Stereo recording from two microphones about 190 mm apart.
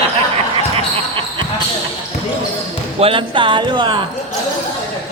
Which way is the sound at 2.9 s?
30° right (ahead or behind).